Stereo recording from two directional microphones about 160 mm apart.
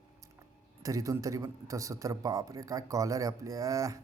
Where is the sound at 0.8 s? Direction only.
20° right (ahead or behind).